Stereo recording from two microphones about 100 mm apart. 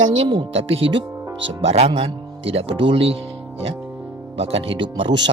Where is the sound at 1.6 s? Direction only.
90° right.